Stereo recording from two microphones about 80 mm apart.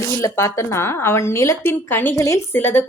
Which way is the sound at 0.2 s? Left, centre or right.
Left.